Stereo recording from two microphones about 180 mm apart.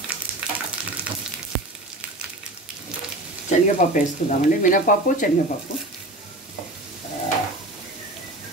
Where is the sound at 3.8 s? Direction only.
45° left (ahead or behind).